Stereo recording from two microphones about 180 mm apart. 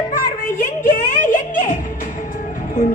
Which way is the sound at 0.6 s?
50° left (ahead or behind).